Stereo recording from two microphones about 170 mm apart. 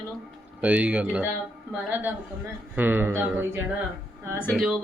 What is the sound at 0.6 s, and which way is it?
Speech, 5° right (ahead or behind).